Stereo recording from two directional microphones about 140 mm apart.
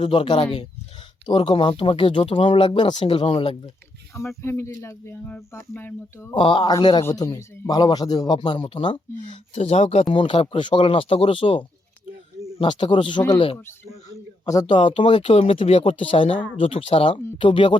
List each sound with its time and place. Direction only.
0.0 s speech: 40° left (ahead or behind)
4.1 s speech: 20° left (ahead or behind)
6.3 s speech: 35° left (ahead or behind)
7.0 s speech: 20° left (ahead or behind); by 9.0 s 40° left (ahead or behind)
9.2 s speech: 55° left (ahead or behind); by 13.4 s 30° left (ahead or behind)
14.4 s speech: 25° left (ahead or behind)